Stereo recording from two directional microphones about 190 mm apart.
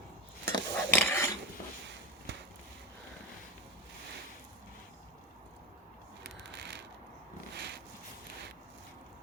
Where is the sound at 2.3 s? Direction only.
70° right (ahead or behind).